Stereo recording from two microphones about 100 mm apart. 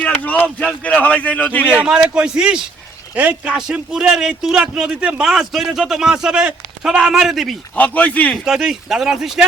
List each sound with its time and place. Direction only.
0.0 s speech: 15° left (ahead or behind)
1.8 s speech: 10° right (ahead or behind)
7.8 s speech: 15° left (ahead or behind)
8.4 s speech: 5° right (ahead or behind)